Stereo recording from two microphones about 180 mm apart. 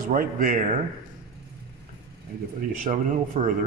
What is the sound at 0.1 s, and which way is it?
Speech, 50° right (ahead or behind).